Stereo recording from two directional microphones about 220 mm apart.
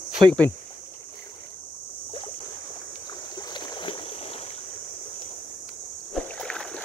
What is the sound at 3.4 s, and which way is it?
Boat, 20° left (ahead or behind).